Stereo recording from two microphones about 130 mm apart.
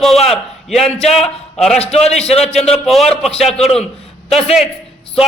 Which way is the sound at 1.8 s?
55° left (ahead or behind).